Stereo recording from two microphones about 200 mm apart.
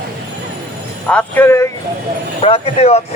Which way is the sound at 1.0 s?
10° left (ahead or behind).